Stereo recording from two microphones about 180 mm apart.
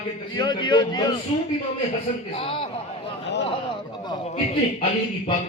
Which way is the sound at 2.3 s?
30° left (ahead or behind).